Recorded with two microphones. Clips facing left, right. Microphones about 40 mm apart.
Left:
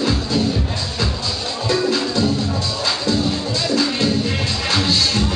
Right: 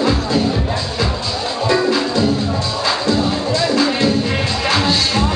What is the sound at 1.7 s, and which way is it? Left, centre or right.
Music, centre.